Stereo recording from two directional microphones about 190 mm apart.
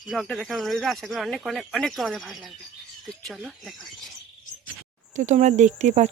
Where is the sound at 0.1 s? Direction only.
Centre (ahead or behind).